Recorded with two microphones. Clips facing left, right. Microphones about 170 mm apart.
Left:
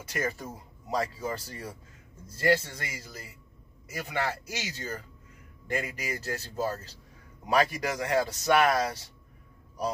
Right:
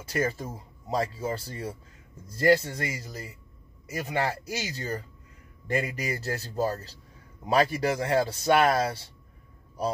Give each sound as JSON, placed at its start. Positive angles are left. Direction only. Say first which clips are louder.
{"t": 0.1, "sound": "speech", "louder": "right 4 dB", "side_deg": -30}